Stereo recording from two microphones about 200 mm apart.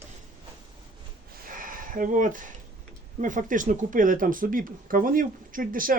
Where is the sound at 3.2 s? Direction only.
40° right (ahead or behind).